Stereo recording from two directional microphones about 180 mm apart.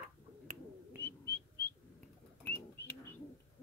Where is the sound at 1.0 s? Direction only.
10° left (ahead or behind).